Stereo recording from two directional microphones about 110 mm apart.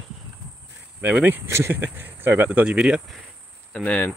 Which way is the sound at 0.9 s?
15° right (ahead or behind).